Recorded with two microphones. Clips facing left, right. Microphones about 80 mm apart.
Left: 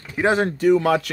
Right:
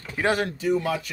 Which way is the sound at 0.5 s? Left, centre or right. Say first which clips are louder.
Left 8 dB; left.